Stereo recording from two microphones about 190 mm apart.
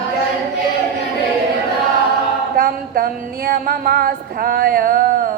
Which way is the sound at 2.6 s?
55° right (ahead or behind).